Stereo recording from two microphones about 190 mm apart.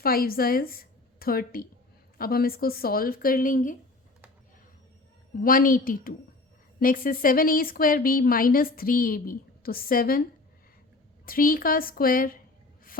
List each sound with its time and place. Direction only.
0.0 s a woman's voice: 50° left (ahead or behind)
5.4 s a woman's voice: 50° left (ahead or behind)
11.3 s a woman's voice: 50° left (ahead or behind)